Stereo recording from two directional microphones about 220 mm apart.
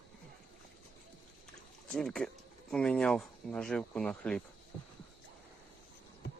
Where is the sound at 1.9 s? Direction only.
5° left (ahead or behind).